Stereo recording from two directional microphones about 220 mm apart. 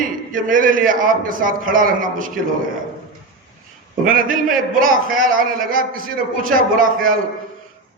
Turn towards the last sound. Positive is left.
turn(degrees=-40)  # may be behind; listen again after turning